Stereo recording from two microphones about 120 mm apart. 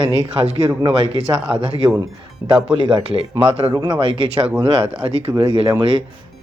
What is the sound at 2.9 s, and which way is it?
Speech, 50° right (ahead or behind).